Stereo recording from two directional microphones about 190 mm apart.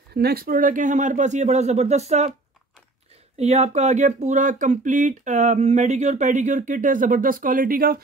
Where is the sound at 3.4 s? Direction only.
35° right (ahead or behind).